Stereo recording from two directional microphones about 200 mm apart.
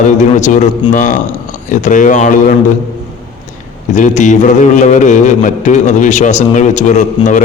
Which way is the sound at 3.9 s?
35° left (ahead or behind).